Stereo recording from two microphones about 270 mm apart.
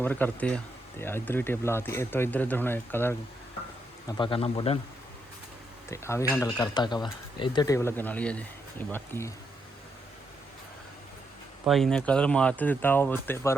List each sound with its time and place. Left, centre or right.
0.0 s speech: centre
4.2 s a man's voice: centre
5.9 s speech: centre
11.6 s speech: centre